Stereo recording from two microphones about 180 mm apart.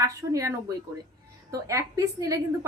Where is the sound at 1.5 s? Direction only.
15° right (ahead or behind).